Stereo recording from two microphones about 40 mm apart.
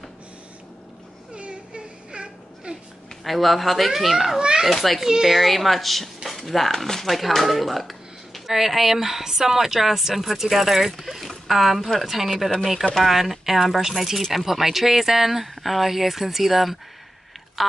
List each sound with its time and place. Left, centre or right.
1.3 s baby cry: right
3.3 s speech: centre
4.4 s a child's voice: right
4.6 s speech: centre
5.0 s speech: centre